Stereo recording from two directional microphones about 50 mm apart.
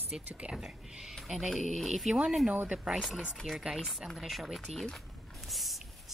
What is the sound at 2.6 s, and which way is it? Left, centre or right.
Speech, centre.